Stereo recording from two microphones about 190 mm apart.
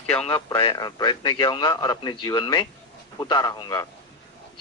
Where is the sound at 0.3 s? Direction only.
25° left (ahead or behind).